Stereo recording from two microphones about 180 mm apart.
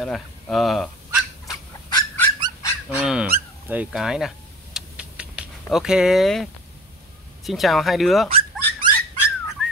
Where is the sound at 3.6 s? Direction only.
5° right (ahead or behind).